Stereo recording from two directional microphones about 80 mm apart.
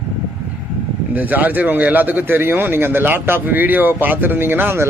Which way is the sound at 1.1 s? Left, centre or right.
Right.